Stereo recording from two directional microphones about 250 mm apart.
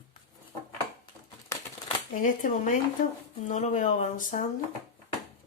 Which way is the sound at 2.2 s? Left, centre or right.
Left.